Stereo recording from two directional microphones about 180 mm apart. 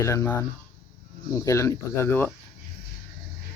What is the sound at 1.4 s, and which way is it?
Speech, 15° left (ahead or behind).